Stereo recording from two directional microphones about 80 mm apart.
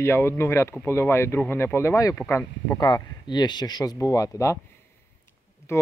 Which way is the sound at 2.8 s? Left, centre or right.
Left.